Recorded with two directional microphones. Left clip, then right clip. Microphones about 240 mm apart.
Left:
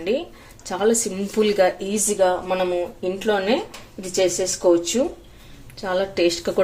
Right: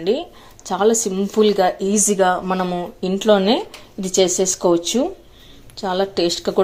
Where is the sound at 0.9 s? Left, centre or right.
Centre.